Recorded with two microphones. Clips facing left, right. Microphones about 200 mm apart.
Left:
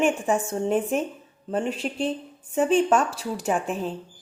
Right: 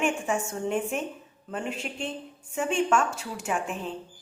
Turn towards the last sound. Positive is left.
turn(degrees=35)  # may be behind; listen again after turning